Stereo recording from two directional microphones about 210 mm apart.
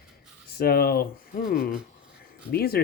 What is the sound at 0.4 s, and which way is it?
Speech, 45° left (ahead or behind).